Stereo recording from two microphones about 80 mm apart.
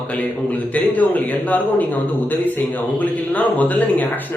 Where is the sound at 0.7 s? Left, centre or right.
Centre.